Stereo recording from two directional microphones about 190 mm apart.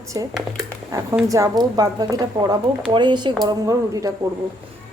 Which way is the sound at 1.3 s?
20° right (ahead or behind).